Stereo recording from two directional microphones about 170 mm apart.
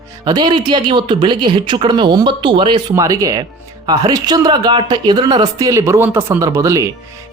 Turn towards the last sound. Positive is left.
turn(degrees=-20)  # may be behind; listen again after turning